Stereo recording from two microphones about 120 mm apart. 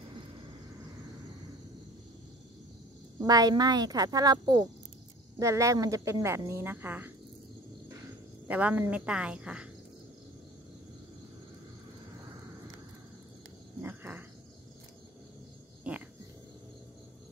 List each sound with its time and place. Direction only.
3.3 s speech: 35° right (ahead or behind); by 7.1 s 15° right (ahead or behind)
8.5 s speech: 10° right (ahead or behind)
13.8 s a sound: 15° right (ahead or behind)
15.9 s dog: 10° right (ahead or behind)